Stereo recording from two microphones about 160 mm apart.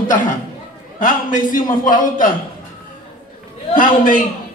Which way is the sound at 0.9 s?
55° left (ahead or behind).